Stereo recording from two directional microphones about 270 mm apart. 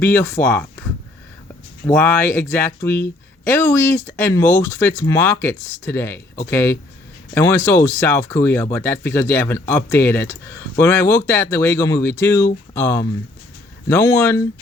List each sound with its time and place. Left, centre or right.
0.0 s speech: centre
1.9 s speech: centre